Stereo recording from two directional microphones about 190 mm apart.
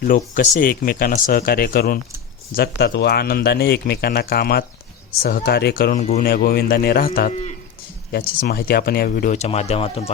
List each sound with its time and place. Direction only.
0.0 s speech: 45° left (ahead or behind)
6.0 s speech: 35° left (ahead or behind)
6.2 s speech: 50° left (ahead or behind); by 10.1 s 30° left (ahead or behind)